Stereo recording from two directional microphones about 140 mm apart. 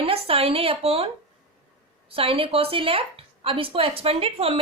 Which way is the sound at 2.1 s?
40° right (ahead or behind).